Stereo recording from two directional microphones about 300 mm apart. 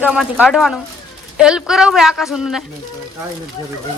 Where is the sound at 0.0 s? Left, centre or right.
Centre.